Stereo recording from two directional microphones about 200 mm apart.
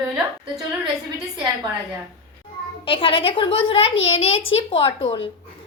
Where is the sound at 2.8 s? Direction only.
25° left (ahead or behind).